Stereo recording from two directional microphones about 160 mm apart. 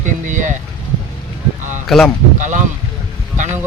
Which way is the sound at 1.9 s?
Centre (ahead or behind).